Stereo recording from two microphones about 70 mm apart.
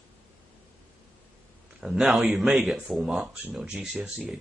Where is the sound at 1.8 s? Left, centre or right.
Centre.